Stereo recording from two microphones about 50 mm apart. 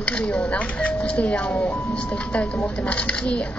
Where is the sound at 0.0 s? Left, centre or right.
Left.